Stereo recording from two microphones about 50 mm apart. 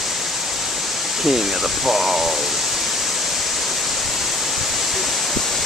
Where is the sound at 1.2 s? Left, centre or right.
Centre.